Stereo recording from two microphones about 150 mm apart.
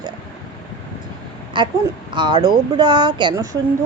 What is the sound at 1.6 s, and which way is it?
A woman's voice, 30° right (ahead or behind).